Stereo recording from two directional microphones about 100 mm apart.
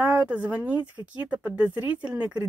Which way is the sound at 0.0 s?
15° right (ahead or behind).